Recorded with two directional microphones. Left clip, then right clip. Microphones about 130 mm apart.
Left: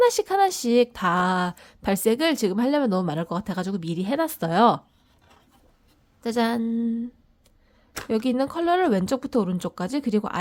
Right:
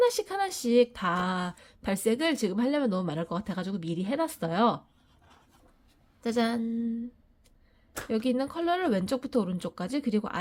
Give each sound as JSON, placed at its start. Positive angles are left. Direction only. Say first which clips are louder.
{"t": 0.0, "sound": "speech", "louder": "left 7 dB", "side_deg": 40}
{"t": 6.2, "sound": "speech", "louder": "left 4 dB", "side_deg": 30}
{"t": 7.9, "sound": "speech", "louder": "left 5 dB", "side_deg": 40}